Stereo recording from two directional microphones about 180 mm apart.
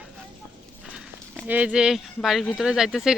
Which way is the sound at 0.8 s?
5° right (ahead or behind).